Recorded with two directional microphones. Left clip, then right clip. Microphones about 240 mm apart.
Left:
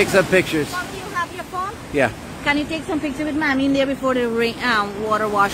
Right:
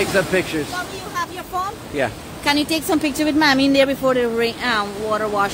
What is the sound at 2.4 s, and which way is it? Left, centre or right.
A woman's voice, right.